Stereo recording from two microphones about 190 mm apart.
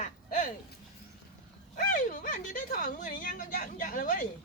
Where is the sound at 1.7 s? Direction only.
45° left (ahead or behind).